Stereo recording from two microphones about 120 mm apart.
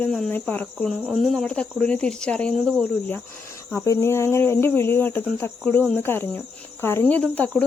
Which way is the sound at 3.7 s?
25° left (ahead or behind).